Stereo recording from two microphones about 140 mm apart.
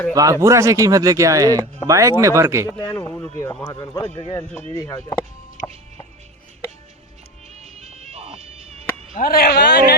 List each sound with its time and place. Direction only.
0.1 s speech: 25° right (ahead or behind)
2.6 s speech: 30° left (ahead or behind)
3.0 s speech: 15° left (ahead or behind)
3.5 s speech: 30° left (ahead or behind)
4.7 s speech: 20° left (ahead or behind)
7.5 s music: 50° right (ahead or behind)
9.1 s a man's voice: 90° left